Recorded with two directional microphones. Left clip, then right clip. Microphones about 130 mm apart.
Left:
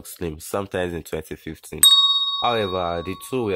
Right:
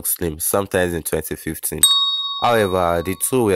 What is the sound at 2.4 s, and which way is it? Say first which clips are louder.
Speech: right 5 dB; 35° right (ahead or behind).